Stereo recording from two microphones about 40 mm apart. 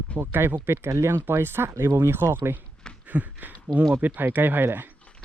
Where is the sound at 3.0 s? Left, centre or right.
Right.